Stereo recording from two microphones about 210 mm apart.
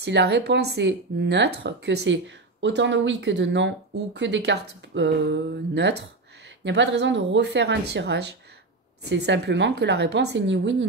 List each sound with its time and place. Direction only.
0.0 s speech: 55° right (ahead or behind)